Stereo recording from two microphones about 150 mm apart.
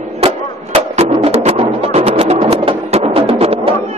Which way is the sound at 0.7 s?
45° right (ahead or behind).